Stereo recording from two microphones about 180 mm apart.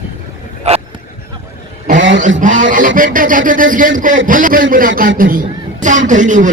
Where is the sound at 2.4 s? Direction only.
45° right (ahead or behind).